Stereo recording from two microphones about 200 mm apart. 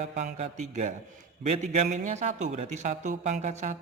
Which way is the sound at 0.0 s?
35° right (ahead or behind).